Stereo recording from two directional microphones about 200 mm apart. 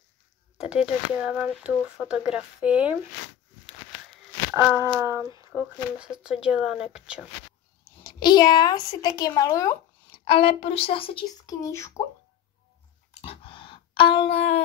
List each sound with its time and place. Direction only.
0.7 s speech: 5° right (ahead or behind)
4.6 s speech: 10° right (ahead or behind)
8.0 s speech: 20° left (ahead or behind)
11.6 s speech: 15° left (ahead or behind)
13.1 s a sound: 30° left (ahead or behind)